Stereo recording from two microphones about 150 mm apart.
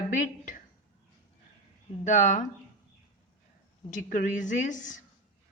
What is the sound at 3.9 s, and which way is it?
Speech, 60° left (ahead or behind).